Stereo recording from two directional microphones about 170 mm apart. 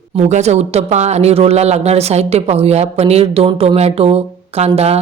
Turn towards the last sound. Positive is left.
turn(degrees=-35)  # may be behind; listen again after turning